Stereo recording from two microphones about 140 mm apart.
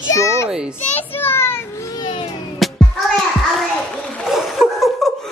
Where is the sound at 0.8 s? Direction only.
15° left (ahead or behind).